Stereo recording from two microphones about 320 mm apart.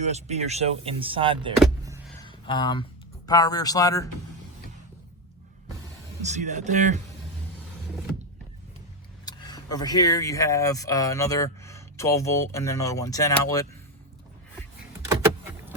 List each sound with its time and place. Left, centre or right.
0.0 s speech: right
1.5 s vehicle: centre
2.2 s a sound: centre
3.2 s speech: centre
6.2 s speech: right
9.2 s speech: centre
14.9 s power windows: centre